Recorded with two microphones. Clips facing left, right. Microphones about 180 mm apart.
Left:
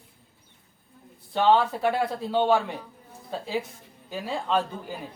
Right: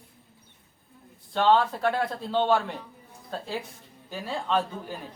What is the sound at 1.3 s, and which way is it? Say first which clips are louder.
Speech: left 1 dB; 10° left (ahead or behind).